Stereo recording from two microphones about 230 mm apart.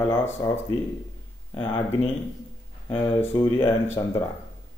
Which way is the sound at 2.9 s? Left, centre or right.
Centre.